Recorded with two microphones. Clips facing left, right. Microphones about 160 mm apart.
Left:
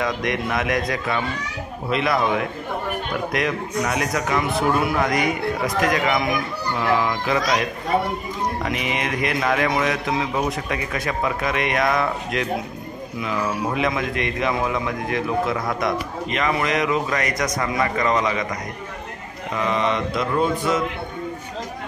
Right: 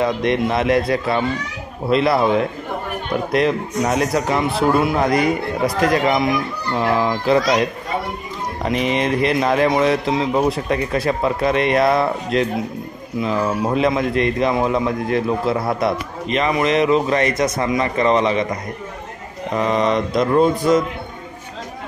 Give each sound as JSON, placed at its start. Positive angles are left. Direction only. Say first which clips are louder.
{"t": 0.0, "sound": "speech", "louder": "right 6 dB", "side_deg": -30}
{"t": 8.6, "sound": "a man's voice", "louder": "right 6 dB", "side_deg": -35}
{"t": 19.5, "sound": "speech", "louder": "right 4 dB", "side_deg": -40}